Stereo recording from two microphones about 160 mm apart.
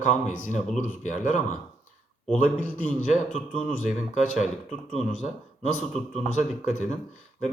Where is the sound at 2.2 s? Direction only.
10° left (ahead or behind).